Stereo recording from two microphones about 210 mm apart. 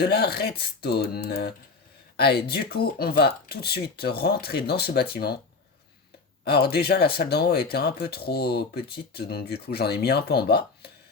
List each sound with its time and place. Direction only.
0.0 s speech: 50° left (ahead or behind)
6.4 s speech: 50° left (ahead or behind)